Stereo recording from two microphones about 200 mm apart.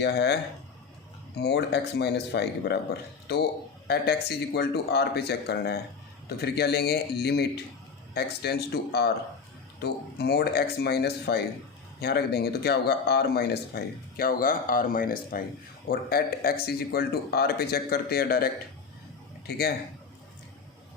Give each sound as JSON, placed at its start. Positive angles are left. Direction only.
{"t": 0.0, "sound": "speech", "side_deg": 55}
{"t": 1.4, "sound": "speech", "side_deg": 55}
{"t": 3.8, "sound": "speech", "side_deg": 50}